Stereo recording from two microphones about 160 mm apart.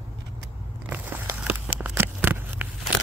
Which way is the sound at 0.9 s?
10° right (ahead or behind).